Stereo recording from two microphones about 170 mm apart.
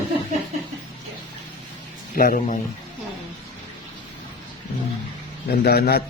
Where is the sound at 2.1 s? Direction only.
55° left (ahead or behind).